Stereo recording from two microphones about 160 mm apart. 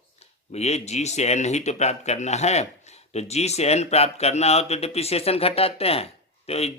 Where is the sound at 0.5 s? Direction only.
45° left (ahead or behind).